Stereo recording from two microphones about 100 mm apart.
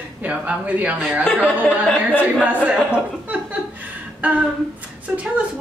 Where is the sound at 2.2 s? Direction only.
15° right (ahead or behind).